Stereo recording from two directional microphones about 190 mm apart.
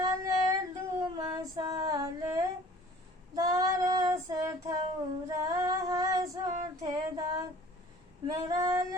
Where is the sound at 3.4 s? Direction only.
20° right (ahead or behind).